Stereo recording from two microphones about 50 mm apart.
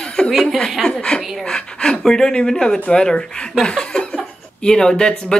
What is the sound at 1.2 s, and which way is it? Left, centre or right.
Speech, centre.